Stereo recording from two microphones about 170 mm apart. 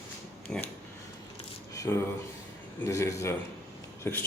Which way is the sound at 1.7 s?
15° left (ahead or behind).